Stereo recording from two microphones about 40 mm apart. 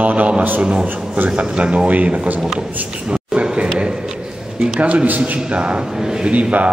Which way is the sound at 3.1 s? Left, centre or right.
Right.